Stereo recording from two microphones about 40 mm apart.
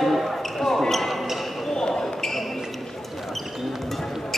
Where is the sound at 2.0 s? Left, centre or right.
Centre.